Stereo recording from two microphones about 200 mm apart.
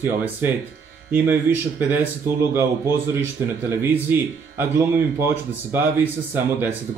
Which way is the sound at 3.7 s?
10° right (ahead or behind).